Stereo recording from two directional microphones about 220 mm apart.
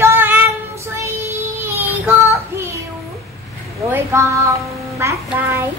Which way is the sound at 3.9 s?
10° right (ahead or behind).